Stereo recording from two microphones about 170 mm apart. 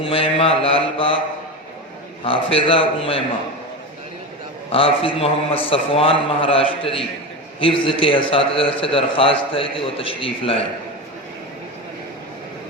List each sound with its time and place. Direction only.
0.0 s mantra: 35° left (ahead or behind)
2.2 s a man's voice: 30° left (ahead or behind)
4.7 s a man's voice: 30° left (ahead or behind)